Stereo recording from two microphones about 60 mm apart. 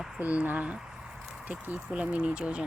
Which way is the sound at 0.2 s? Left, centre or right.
Right.